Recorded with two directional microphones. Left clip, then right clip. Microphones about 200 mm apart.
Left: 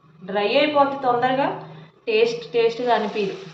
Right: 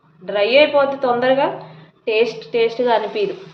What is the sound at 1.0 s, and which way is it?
Speech, 50° right (ahead or behind).